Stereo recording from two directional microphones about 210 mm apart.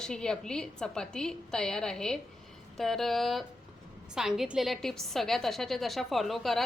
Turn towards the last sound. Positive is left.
turn(degrees=0)  # may be behind; listen again after turning